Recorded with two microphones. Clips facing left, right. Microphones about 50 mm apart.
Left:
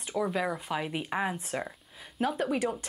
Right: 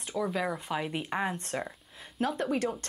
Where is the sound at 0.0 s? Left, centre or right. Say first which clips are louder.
Left 1 dB; centre.